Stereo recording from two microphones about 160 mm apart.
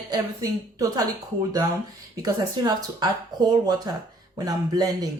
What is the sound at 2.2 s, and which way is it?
Speech, 25° right (ahead or behind).